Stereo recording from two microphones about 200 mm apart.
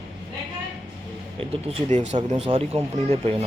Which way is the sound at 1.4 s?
35° right (ahead or behind).